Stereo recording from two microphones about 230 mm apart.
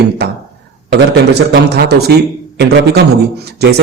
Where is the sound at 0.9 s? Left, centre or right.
Right.